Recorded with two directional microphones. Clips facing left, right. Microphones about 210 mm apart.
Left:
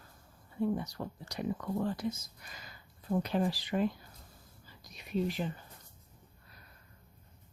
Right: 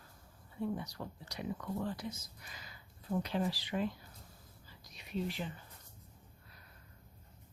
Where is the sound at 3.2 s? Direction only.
45° left (ahead or behind).